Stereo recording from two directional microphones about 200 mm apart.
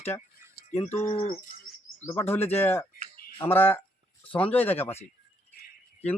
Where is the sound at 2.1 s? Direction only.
10° left (ahead or behind).